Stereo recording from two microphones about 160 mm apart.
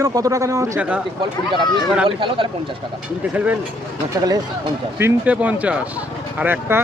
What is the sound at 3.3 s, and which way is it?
Speech, 10° right (ahead or behind).